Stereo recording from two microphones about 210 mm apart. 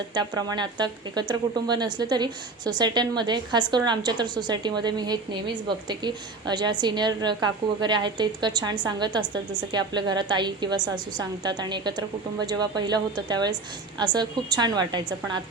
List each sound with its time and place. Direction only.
0.1 s speech: 20° right (ahead or behind)